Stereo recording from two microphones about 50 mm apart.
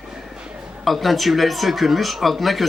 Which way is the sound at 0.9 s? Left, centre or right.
Centre.